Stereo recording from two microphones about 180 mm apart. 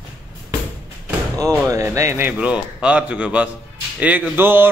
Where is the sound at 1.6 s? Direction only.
15° right (ahead or behind).